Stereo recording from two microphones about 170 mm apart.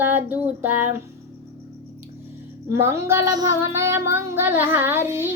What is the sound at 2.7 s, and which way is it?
Female singing, 15° right (ahead or behind).